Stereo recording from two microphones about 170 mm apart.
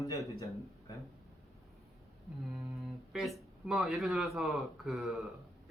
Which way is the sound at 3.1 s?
Centre (ahead or behind).